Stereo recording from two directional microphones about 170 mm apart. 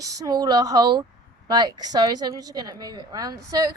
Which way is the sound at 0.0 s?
20° right (ahead or behind).